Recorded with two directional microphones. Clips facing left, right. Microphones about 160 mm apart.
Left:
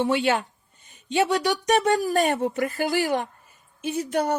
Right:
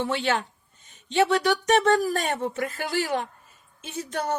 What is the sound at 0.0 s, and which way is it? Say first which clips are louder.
Speech: left 4 dB; 15° left (ahead or behind).